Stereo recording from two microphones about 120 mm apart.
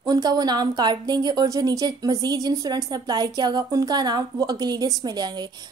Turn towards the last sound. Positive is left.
turn(degrees=-35)  # may be behind; listen again after turning